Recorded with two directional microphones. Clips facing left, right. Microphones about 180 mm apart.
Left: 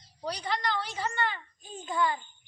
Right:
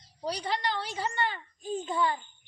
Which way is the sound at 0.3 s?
35° right (ahead or behind).